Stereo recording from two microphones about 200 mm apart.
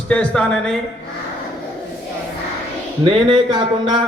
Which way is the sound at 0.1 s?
5° left (ahead or behind).